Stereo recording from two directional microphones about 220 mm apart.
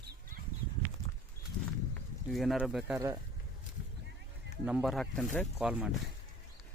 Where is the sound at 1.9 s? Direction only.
Centre (ahead or behind).